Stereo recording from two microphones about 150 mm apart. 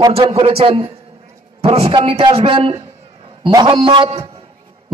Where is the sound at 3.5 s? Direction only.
25° right (ahead or behind).